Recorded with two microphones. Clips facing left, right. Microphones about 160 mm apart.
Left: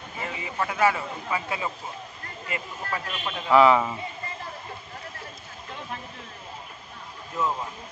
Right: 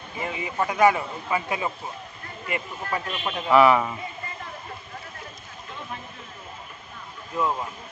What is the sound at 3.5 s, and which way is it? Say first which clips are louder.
Speech: even; 20° left (ahead or behind).